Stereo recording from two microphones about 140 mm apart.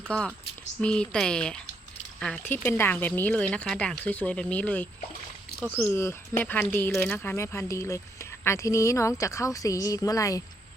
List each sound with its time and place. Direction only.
0.1 s speech: 10° left (ahead or behind)
2.5 s speech: 15° left (ahead or behind)